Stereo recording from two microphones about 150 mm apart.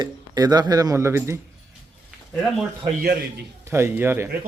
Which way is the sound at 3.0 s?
90° right.